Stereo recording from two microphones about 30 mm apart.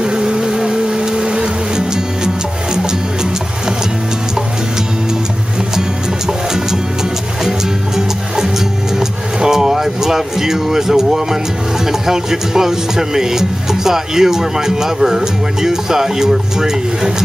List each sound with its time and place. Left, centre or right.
0.0 s music: right
5.8 s music: centre
11.8 s speech: centre